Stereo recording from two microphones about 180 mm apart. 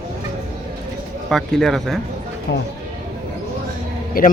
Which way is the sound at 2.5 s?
70° left (ahead or behind).